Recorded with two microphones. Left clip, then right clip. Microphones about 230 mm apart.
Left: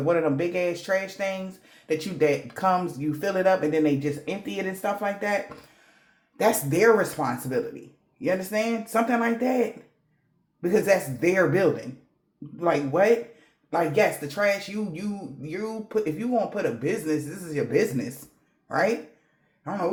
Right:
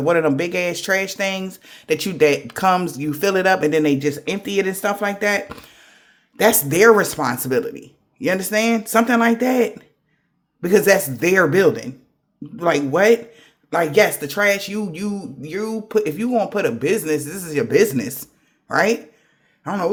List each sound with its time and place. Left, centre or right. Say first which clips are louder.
0.0 s a man's voice: right 6 dB; right
14.3 s a man's voice: right 6 dB; right